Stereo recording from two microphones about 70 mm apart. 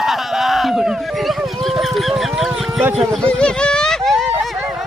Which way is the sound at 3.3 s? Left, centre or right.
Centre.